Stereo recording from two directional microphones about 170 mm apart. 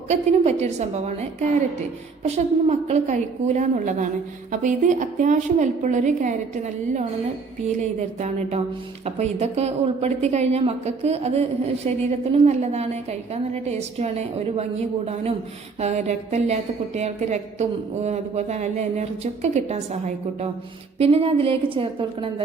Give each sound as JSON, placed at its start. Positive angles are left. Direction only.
{"t": 0.1, "sound": "a woman's voice", "side_deg": -40}